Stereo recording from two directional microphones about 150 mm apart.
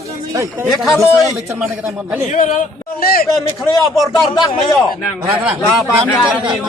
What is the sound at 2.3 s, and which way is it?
Speech, 60° left (ahead or behind).